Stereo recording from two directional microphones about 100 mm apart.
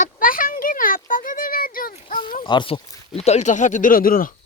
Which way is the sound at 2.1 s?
55° left (ahead or behind).